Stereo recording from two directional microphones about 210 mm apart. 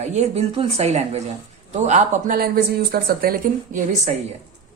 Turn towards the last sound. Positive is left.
turn(degrees=-35)  # may be behind; listen again after turning